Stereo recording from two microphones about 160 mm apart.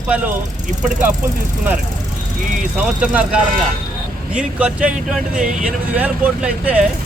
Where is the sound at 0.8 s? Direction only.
50° right (ahead or behind).